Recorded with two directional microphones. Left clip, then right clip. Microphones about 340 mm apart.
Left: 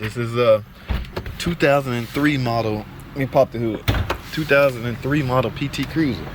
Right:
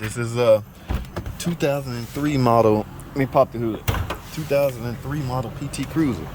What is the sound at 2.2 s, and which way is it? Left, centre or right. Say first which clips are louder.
Speech: right 5 dB; centre.